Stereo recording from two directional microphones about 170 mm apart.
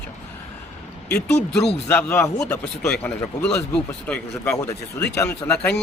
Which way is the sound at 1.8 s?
15° left (ahead or behind).